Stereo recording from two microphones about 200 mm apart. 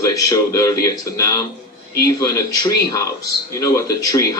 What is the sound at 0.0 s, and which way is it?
Speech, 15° left (ahead or behind).